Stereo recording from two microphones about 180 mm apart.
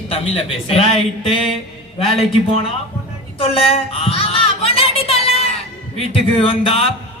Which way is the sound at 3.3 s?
30° left (ahead or behind).